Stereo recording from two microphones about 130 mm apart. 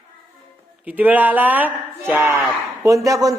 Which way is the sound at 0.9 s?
15° right (ahead or behind).